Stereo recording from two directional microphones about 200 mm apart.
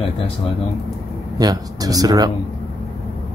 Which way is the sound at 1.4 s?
20° right (ahead or behind).